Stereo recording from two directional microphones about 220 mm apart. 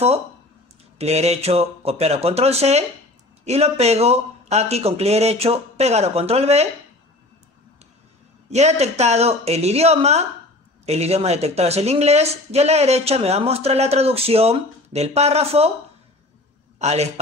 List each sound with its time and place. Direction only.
0.9 s speech: 30° right (ahead or behind)
8.5 s speech: 30° right (ahead or behind)
16.7 s a man's voice: 30° right (ahead or behind)